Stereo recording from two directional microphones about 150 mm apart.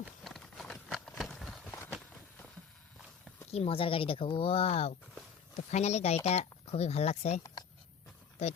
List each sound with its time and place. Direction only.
0.3 s clip-clop: centre (ahead or behind)
3.5 s speech: 40° left (ahead or behind)